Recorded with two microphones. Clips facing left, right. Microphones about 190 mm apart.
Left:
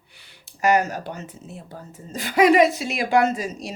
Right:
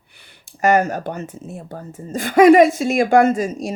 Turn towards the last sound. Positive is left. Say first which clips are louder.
# right 5 dB
turn(degrees=-50)  # may be behind; listen again after turning